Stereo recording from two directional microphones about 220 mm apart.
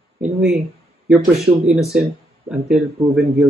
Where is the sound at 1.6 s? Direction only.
Centre (ahead or behind).